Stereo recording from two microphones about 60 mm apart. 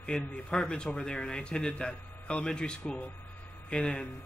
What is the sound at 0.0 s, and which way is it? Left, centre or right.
A man's voice, centre.